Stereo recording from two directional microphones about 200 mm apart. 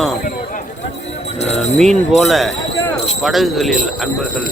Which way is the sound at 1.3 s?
35° left (ahead or behind).